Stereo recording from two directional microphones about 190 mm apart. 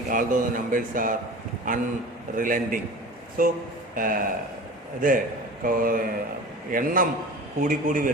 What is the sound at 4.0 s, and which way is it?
Speech, 45° right (ahead or behind).